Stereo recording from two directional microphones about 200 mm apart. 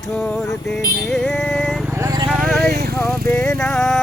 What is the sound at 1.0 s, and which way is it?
Speech, 5° left (ahead or behind).